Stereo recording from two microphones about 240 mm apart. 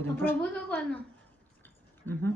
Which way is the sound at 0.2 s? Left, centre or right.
Centre.